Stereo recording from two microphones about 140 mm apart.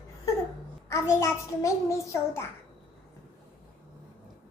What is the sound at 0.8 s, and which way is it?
A child's voice, 20° left (ahead or behind).